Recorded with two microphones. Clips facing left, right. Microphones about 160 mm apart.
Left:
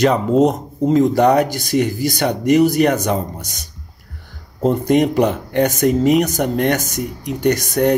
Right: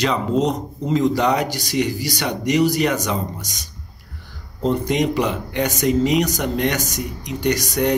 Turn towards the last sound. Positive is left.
turn(degrees=55)  # may be behind; listen again after turning